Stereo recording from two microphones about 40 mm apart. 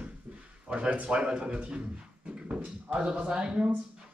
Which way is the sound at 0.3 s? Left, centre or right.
Right.